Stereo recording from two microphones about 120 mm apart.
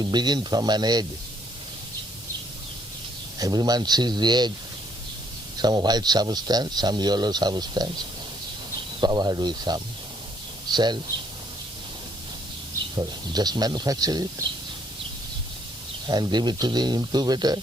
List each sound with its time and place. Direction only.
0.0 s speech: 35° right (ahead or behind)
3.3 s speech: 35° right (ahead or behind)
5.6 s speech: 35° right (ahead or behind)
9.0 s speech: 35° right (ahead or behind)
13.0 s speech: 35° right (ahead or behind)
16.0 s speech: 35° right (ahead or behind)